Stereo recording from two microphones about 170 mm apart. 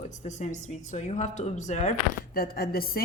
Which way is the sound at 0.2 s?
45° left (ahead or behind).